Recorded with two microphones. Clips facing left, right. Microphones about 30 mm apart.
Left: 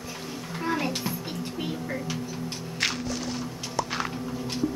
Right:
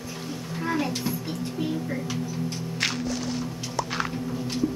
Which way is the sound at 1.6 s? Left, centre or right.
Left.